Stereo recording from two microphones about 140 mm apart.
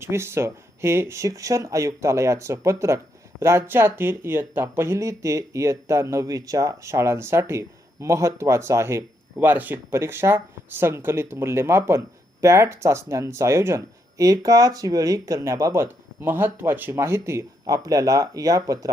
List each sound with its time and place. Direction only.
0.0 s speech: 20° right (ahead or behind)